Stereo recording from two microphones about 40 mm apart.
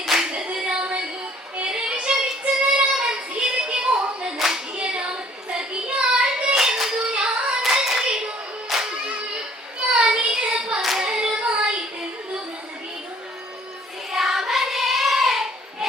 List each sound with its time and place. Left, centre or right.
0.2 s female singing: right
1.6 s child singing: right
4.4 s clapping: centre
4.7 s clapping: right
5.5 s child singing: right
7.1 s hands: right
7.6 s clapping: centre
8.7 s music: centre
9.9 s child singing: right
10.8 s singing: centre
11.0 s hands: right
14.1 s child singing: centre